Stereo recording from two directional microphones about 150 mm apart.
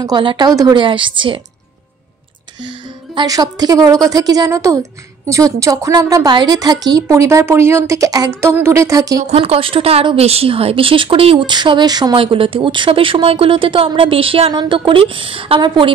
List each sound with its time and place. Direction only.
0.0 s a woman's voice: 30° right (ahead or behind)
3.2 s a woman's voice: 25° right (ahead or behind)
9.2 s a woman's voice: 45° right (ahead or behind)